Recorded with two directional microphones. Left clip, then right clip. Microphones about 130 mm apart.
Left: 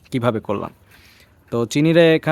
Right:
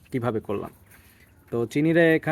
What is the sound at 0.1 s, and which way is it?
Speech, 55° left (ahead or behind).